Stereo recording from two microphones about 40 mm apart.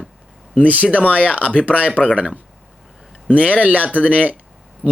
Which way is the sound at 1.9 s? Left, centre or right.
Left.